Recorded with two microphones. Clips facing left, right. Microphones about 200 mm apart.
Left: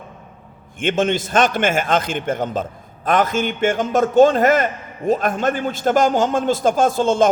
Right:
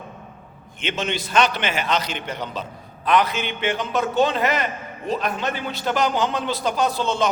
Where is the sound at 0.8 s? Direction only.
50° left (ahead or behind).